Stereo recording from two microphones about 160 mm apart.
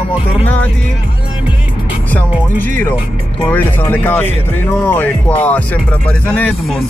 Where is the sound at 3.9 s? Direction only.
10° left (ahead or behind).